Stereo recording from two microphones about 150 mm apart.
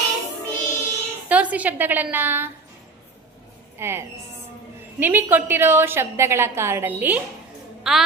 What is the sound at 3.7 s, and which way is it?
A woman's voice, 15° right (ahead or behind).